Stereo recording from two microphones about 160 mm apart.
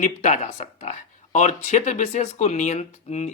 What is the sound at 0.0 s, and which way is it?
Speech, 50° left (ahead or behind).